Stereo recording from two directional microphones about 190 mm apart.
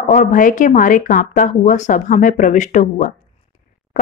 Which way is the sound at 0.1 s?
40° left (ahead or behind).